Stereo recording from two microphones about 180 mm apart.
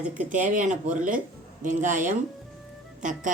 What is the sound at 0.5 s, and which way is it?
Speech, 45° right (ahead or behind).